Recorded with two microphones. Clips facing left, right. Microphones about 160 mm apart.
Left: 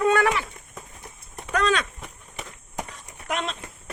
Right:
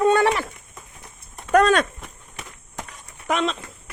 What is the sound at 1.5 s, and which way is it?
Speech, 50° right (ahead or behind).